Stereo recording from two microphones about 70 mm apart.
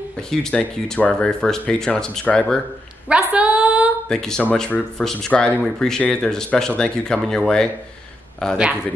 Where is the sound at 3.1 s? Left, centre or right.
Centre.